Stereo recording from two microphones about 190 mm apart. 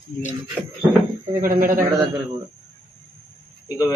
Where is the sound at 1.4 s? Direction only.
45° right (ahead or behind).